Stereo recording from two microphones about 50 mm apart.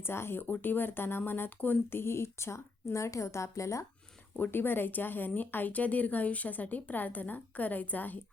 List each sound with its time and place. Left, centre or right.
0.0 s speech: left
2.0 s a woman's voice: left
4.5 s a woman's voice: left